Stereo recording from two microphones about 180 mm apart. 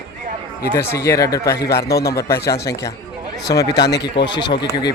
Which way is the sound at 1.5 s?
60° left (ahead or behind).